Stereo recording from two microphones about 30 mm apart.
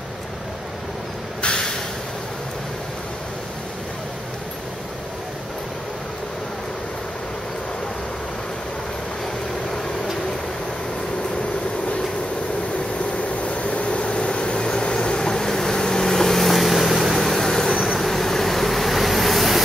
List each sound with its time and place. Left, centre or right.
13.4 s vehicle: left; by 17.2 s centre
17.2 s vehicle: centre